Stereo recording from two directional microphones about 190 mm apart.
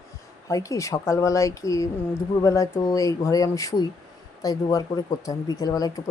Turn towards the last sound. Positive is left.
turn(degrees=20)  # may be behind; listen again after turning